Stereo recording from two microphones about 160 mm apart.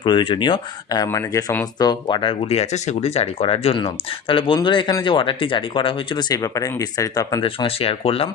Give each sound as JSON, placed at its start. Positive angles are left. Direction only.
{"t": 0.0, "sound": "speech", "side_deg": 30}